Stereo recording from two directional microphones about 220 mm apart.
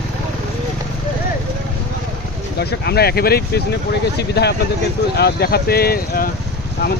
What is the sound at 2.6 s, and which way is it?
Speech, 45° left (ahead or behind).